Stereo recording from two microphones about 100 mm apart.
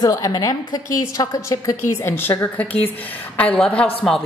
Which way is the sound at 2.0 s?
20° left (ahead or behind).